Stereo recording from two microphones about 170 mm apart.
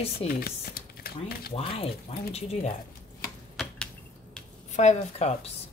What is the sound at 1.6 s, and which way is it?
Speech, 35° left (ahead or behind).